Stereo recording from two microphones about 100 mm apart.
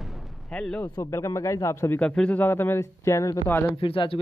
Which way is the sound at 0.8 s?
30° left (ahead or behind).